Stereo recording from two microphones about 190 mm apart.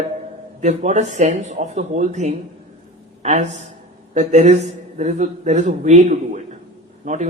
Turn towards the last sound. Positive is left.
turn(degrees=-40)  # may be behind; listen again after turning